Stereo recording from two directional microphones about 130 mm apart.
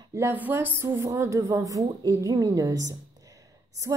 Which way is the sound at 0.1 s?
20° right (ahead or behind).